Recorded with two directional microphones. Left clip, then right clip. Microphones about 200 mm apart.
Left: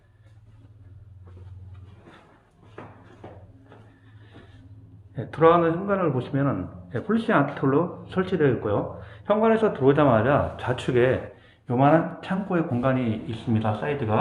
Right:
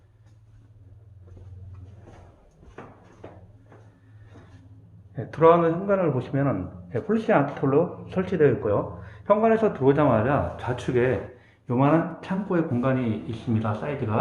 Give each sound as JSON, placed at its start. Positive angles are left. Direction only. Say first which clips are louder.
{"t": 5.1, "sound": "speech", "louder": "even", "side_deg": -5}
{"t": 13.6, "sound": "speech", "louder": "left 3 dB", "side_deg": 10}